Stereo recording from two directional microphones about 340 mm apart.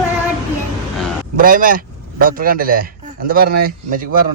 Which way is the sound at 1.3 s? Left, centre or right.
Right.